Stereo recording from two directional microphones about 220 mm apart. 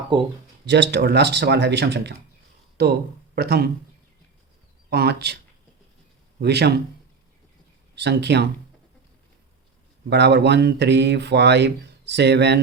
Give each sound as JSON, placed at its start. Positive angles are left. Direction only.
{"t": 0.1, "sound": "speech", "side_deg": -25}
{"t": 0.6, "sound": "speech", "side_deg": -50}
{"t": 4.9, "sound": "speech", "side_deg": -50}
{"t": 6.4, "sound": "speech", "side_deg": -50}
{"t": 7.9, "sound": "speech", "side_deg": -50}
{"t": 10.1, "sound": "speech", "side_deg": -50}